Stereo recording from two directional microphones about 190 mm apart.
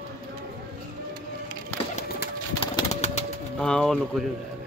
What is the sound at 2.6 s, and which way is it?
Pigeon, 30° left (ahead or behind).